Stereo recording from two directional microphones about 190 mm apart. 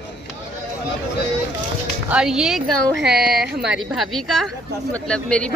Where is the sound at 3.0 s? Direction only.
55° right (ahead or behind).